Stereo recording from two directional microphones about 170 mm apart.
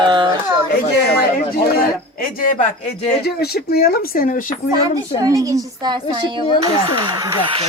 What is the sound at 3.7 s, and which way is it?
Speech, 60° left (ahead or behind).